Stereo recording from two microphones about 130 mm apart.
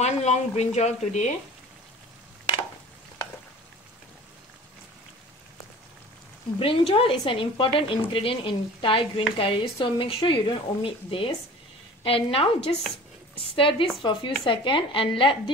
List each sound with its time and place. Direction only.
0.0 s speech: 60° left (ahead or behind)
6.6 s a woman's voice: 45° left (ahead or behind)